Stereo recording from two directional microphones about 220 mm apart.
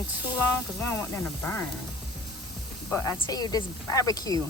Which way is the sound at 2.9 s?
15° left (ahead or behind).